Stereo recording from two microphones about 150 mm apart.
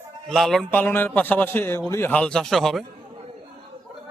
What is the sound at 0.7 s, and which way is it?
A man's voice, 15° left (ahead or behind).